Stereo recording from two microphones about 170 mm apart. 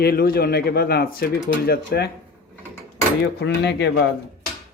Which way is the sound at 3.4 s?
80° left.